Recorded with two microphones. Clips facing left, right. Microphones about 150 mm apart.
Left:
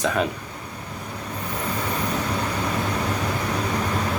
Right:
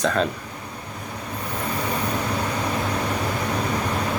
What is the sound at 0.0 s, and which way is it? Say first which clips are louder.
Speech: right 1 dB; 10° left (ahead or behind).